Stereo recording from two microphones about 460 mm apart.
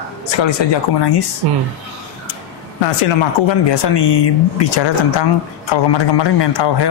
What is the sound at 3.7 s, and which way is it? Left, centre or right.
Speech, left.